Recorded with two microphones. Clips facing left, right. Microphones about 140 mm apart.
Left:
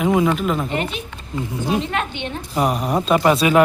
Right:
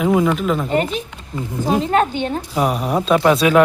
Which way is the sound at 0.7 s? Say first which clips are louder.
Right 5 dB; 40° right (ahead or behind).